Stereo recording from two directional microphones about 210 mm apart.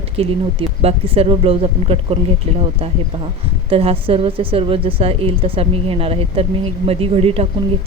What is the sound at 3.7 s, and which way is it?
Speech, 25° right (ahead or behind).